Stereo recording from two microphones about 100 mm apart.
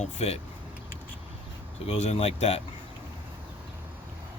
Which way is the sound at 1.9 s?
90° left.